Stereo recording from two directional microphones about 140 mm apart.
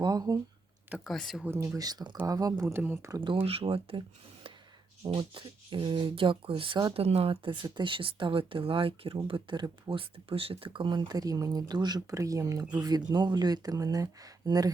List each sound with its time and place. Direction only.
0.0 s speech: 25° right (ahead or behind)
0.9 s speech: 10° right (ahead or behind)
1.5 s speech: 20° right (ahead or behind)
3.4 s speech: 45° right (ahead or behind)
5.0 s speech: 35° right (ahead or behind)
7.0 s speech: 45° right (ahead or behind); by 14.7 s 25° right (ahead or behind)